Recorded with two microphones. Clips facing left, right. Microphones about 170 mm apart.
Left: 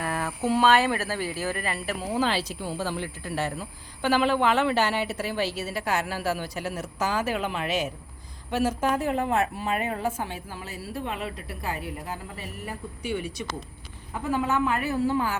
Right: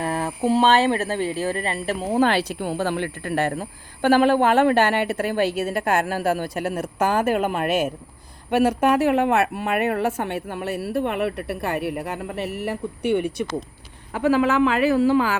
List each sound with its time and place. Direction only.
0.0 s speech: 30° right (ahead or behind)
2.1 s speech: 60° right (ahead or behind)
8.8 s speech: 75° right (ahead or behind)
14.1 s a woman's voice: 90° right